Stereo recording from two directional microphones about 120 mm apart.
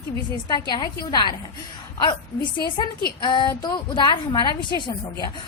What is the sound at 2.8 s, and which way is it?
A woman's voice, 35° left (ahead or behind).